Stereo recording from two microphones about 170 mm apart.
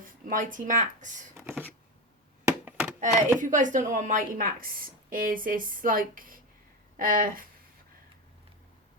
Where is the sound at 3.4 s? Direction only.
50° right (ahead or behind).